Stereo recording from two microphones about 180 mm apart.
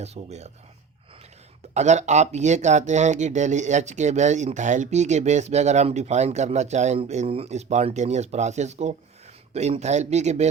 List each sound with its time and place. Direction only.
0.0 s speech: 35° right (ahead or behind)
1.7 s speech: 40° right (ahead or behind)